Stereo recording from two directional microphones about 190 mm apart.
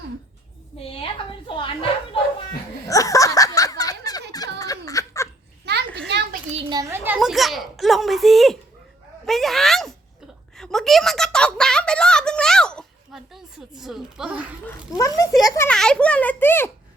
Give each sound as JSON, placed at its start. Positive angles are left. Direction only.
{"t": 0.8, "sound": "a woman's voice", "side_deg": 30}
{"t": 2.8, "sound": "laughter", "side_deg": 15}
{"t": 4.6, "sound": "giggle", "side_deg": 20}
{"t": 5.6, "sound": "children playing", "side_deg": -60}
{"t": 6.5, "sound": "a child's voice", "side_deg": -25}
{"t": 14.9, "sound": "a child's voice", "side_deg": 20}
{"t": 15.7, "sound": "a child's voice", "side_deg": 5}